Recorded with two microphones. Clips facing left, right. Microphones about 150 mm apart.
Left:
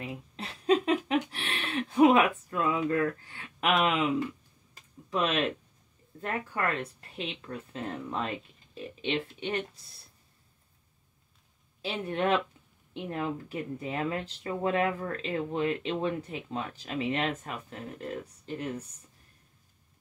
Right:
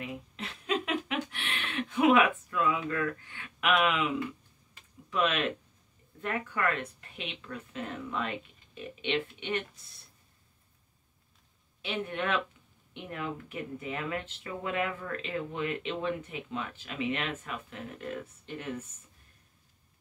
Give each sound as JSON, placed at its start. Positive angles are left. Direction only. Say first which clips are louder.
{"t": 0.0, "sound": "a sound", "louder": "even", "side_deg": 35}
{"t": 6.2, "sound": "speech", "louder": "even", "side_deg": 35}
{"t": 11.8, "sound": "speech", "louder": "left 4 dB", "side_deg": 35}